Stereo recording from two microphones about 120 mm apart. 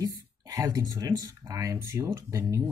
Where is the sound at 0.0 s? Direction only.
30° right (ahead or behind).